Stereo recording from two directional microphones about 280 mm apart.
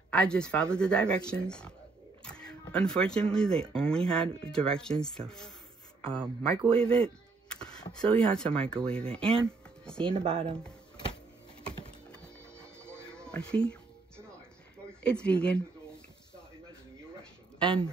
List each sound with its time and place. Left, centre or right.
0.1 s speech: centre
7.5 s a sound: centre
7.9 s speech: centre
10.0 s speech: centre
10.4 s speech: centre
12.1 s music: centre
15.0 s speech: centre
17.6 s speech: centre